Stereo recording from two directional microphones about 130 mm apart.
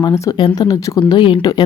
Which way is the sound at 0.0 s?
30° left (ahead or behind).